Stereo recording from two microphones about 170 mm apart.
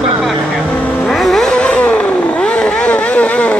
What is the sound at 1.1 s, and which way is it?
Vehicle, centre (ahead or behind).